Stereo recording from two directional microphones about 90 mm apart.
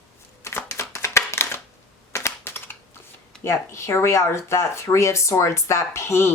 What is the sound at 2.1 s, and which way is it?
Typing, 25° left (ahead or behind).